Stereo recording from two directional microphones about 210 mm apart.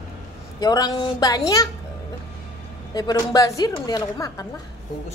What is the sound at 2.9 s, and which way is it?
Speech, 20° left (ahead or behind).